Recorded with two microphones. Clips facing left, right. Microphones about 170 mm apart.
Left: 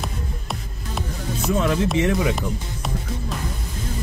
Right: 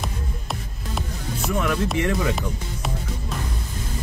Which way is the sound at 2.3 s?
Centre (ahead or behind).